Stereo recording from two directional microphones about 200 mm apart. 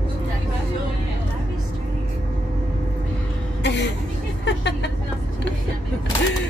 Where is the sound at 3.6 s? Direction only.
60° left (ahead or behind).